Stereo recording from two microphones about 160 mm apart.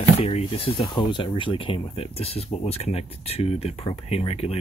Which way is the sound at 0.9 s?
30° left (ahead or behind).